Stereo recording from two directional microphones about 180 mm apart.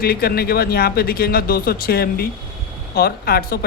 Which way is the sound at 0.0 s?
60° left (ahead or behind).